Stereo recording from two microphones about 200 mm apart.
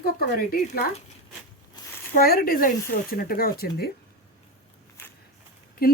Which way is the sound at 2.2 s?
45° left (ahead or behind).